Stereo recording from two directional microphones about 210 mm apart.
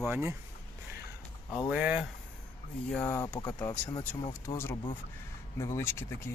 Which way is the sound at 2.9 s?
5° left (ahead or behind).